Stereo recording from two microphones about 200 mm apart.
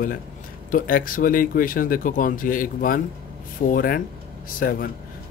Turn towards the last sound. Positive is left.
turn(degrees=45)  # may be behind; listen again after turning